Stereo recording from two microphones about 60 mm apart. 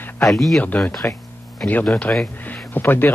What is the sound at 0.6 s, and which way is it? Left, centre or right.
Speech, left.